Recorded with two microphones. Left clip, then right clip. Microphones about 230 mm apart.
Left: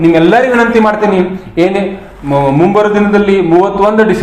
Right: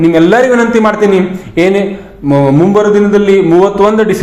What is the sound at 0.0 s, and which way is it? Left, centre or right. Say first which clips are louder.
A man's voice: even; right.